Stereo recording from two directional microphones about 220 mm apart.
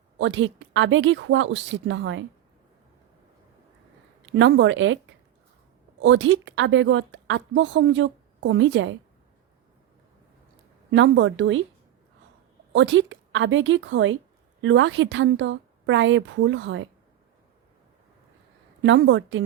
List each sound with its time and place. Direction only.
0.2 s a woman's voice: 55° right (ahead or behind)
4.3 s a woman's voice: 55° right (ahead or behind)
6.0 s a woman's voice: 55° right (ahead or behind)
10.9 s a woman's voice: 55° right (ahead or behind)
12.7 s a woman's voice: 55° right (ahead or behind)
18.8 s a woman's voice: 55° right (ahead or behind)